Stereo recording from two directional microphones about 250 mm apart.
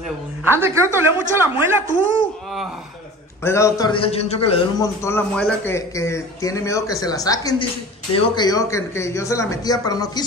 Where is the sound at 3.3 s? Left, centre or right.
Centre.